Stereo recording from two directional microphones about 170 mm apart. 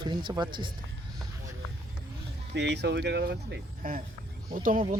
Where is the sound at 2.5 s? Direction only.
85° right; by 4.0 s 60° right (ahead or behind).